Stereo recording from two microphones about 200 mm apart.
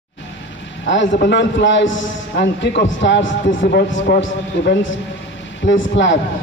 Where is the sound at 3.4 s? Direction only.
45° left (ahead or behind).